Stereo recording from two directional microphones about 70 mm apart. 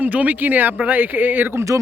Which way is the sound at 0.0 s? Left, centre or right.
Right.